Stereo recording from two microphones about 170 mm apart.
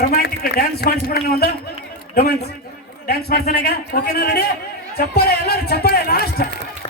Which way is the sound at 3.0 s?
65° left (ahead or behind).